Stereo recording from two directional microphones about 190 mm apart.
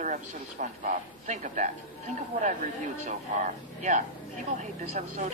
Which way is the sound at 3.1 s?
40° right (ahead or behind).